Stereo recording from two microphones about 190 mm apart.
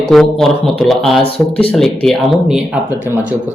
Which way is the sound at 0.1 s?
Centre (ahead or behind).